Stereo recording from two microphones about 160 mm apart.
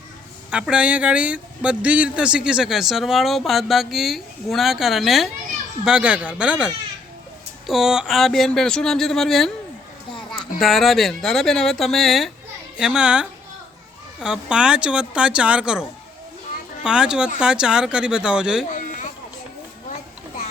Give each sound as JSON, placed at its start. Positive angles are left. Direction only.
{"t": 0.5, "sound": "speech", "side_deg": -5}
{"t": 7.7, "sound": "speech", "side_deg": -5}
{"t": 10.6, "sound": "speech", "side_deg": 0}
{"t": 18.7, "sound": "a sound", "side_deg": 55}